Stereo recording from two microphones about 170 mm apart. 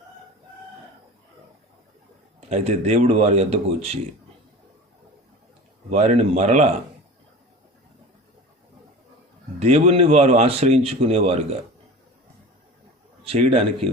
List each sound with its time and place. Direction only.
2.5 s a man's voice: 40° right (ahead or behind)
5.9 s a man's voice: 40° right (ahead or behind)
9.6 s a man's voice: 40° right (ahead or behind)
13.2 s a man's voice: 35° right (ahead or behind)